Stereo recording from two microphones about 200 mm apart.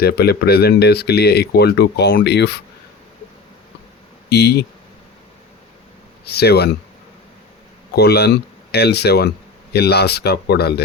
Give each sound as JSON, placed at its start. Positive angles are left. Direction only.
{"t": 0.0, "sound": "speech", "side_deg": 50}
{"t": 4.3, "sound": "speech", "side_deg": 55}
{"t": 6.2, "sound": "speech", "side_deg": 55}
{"t": 7.9, "sound": "speech", "side_deg": 55}